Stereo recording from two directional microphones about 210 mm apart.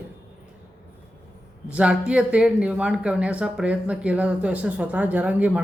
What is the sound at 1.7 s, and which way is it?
Speech, 5° right (ahead or behind).